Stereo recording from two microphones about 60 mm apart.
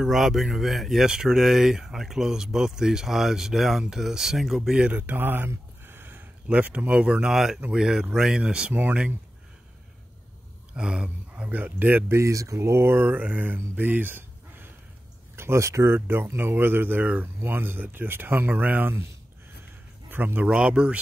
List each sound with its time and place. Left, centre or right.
0.0 s speech: centre
4.8 s speech: right
5.9 s a sound: right
6.4 s speech: right
10.7 s speech: centre
11.4 s speech: right
12.1 s speech: right
13.7 s a sound: right
15.3 s speech: right
15.9 s speech: right
20.1 s a man's voice: right
20.4 s speech: centre